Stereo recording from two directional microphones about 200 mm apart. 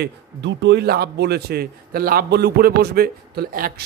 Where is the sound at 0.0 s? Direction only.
60° right (ahead or behind).